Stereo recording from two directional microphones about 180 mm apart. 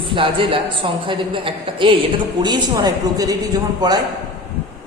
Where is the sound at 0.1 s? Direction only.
30° right (ahead or behind).